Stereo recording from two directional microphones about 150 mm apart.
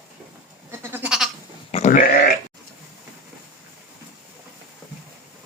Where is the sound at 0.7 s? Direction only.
15° right (ahead or behind).